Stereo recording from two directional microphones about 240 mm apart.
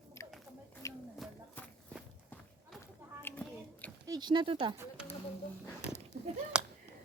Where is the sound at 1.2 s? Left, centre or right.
Centre.